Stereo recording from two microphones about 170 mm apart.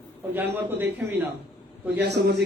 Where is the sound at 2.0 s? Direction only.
80° right.